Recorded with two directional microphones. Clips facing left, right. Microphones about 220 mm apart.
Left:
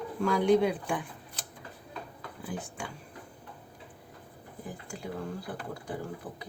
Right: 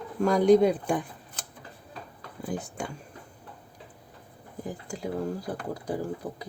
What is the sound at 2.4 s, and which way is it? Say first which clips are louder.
Speech: right 5 dB; 40° right (ahead or behind).